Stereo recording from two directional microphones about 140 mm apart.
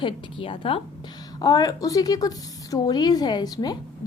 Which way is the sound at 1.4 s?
30° left (ahead or behind).